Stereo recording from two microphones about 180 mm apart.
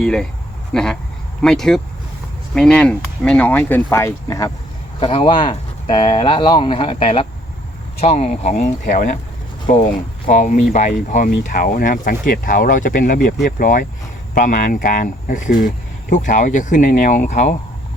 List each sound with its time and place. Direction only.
0.0 s speech: centre (ahead or behind); by 17.5 s 40° left (ahead or behind)